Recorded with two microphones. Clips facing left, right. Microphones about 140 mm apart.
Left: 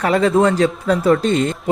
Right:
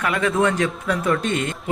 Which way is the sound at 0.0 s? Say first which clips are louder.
Left 6 dB; 35° left (ahead or behind).